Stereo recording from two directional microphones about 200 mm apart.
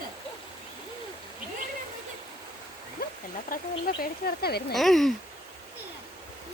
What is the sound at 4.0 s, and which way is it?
Speech, 50° left (ahead or behind).